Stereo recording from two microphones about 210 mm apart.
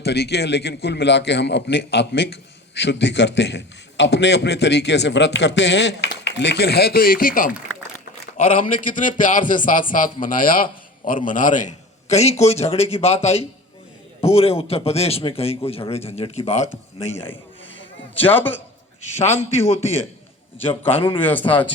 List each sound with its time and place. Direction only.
0.0 s a man's voice: 50° left (ahead or behind); by 16.4 s 30° left (ahead or behind)
18.2 s a man's voice: 10° left (ahead or behind)
19.2 s a man's voice: 30° left (ahead or behind)
21.2 s a man's voice: 10° left (ahead or behind)